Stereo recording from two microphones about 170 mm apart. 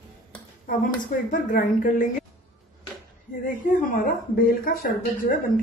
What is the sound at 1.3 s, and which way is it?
Speech, 50° left (ahead or behind).